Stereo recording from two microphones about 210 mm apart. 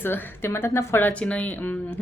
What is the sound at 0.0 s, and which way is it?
A woman's voice, 10° left (ahead or behind).